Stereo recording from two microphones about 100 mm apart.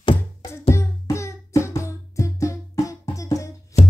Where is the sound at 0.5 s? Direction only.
25° left (ahead or behind).